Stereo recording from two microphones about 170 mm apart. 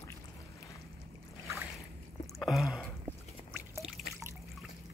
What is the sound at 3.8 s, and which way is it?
Drip, 5° right (ahead or behind).